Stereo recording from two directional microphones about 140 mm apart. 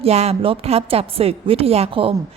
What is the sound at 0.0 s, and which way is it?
A woman's voice, 50° right (ahead or behind).